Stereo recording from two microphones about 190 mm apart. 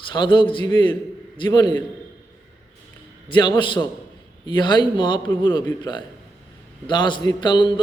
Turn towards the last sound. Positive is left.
turn(degrees=25)  # may be behind; listen again after turning